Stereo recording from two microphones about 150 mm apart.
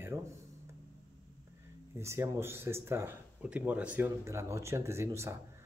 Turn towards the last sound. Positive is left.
turn(degrees=-20)  # may be behind; listen again after turning